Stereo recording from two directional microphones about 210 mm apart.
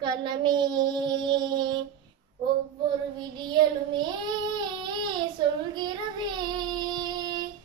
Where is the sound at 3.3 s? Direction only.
20° right (ahead or behind).